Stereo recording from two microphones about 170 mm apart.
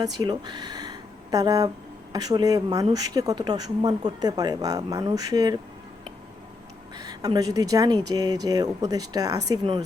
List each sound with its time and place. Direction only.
0.0 s speech: 25° right (ahead or behind)
6.9 s speech: 20° right (ahead or behind)